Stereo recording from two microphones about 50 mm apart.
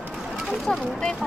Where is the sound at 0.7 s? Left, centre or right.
Left.